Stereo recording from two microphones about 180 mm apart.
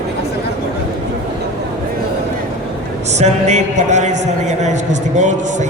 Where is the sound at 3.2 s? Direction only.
40° right (ahead or behind).